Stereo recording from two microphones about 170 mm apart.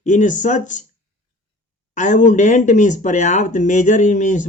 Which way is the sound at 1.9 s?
45° left (ahead or behind).